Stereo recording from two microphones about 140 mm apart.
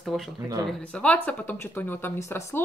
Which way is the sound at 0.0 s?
Centre (ahead or behind).